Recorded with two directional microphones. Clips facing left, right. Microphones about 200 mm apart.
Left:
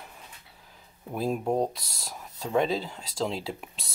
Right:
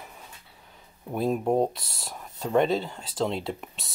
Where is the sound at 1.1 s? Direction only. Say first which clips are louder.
Right 3 dB; centre (ahead or behind).